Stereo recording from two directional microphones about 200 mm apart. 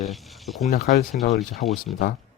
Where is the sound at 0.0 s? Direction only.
Centre (ahead or behind).